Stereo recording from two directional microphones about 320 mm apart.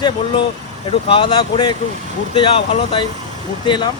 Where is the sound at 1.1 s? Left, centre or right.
Centre.